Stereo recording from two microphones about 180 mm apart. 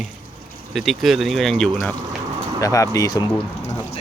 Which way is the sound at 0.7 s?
Centre (ahead or behind).